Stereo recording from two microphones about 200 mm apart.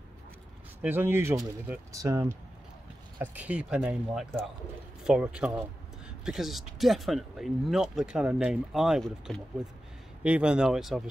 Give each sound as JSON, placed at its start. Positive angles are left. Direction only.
{"t": 0.8, "sound": "speech", "side_deg": -10}